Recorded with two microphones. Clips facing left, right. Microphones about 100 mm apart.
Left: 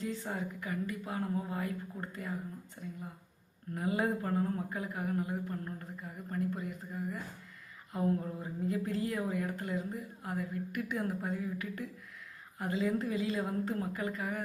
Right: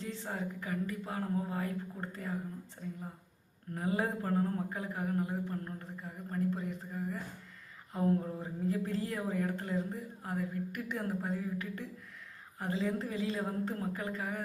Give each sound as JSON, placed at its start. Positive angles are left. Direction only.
{"t": 0.2, "sound": "speech", "side_deg": -35}
{"t": 3.8, "sound": "speech", "side_deg": -30}